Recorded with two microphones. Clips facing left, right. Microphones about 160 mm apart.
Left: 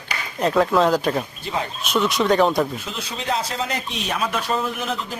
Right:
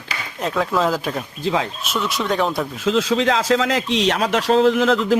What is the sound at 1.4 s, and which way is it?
Speech, 90° right.